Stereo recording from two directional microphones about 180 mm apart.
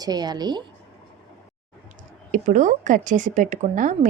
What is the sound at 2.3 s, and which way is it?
Speech, 45° right (ahead or behind).